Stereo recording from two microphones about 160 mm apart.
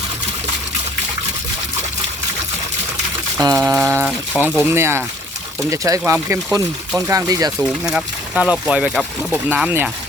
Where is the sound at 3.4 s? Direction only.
20° right (ahead or behind).